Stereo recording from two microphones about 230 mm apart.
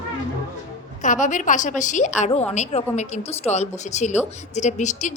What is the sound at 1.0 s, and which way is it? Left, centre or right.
Speech, left.